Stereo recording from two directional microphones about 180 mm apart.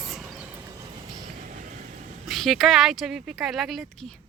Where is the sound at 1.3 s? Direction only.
45° right (ahead or behind).